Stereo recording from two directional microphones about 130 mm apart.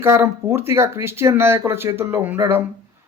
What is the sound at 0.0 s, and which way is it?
A man's voice, 20° right (ahead or behind).